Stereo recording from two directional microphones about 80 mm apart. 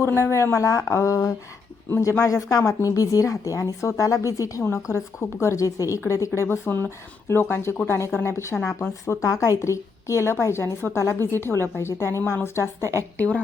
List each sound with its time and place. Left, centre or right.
0.0 s speech: left
6.5 s speech: left
12.8 s a woman's voice: right
13.1 s a woman's voice: centre